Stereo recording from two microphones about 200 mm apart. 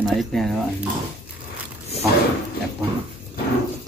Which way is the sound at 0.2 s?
Centre (ahead or behind).